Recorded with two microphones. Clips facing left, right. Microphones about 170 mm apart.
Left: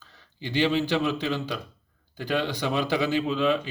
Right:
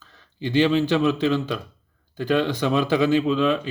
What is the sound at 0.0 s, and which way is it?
Speech, 50° right (ahead or behind).